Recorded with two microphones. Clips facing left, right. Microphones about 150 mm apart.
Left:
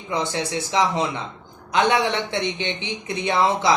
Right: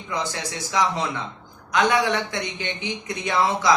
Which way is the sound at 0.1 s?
25° left (ahead or behind).